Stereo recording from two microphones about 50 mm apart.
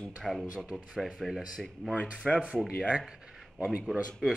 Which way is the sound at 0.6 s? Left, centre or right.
Right.